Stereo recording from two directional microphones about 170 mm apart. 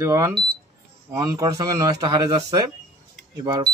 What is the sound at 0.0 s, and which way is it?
Speech, 15° right (ahead or behind).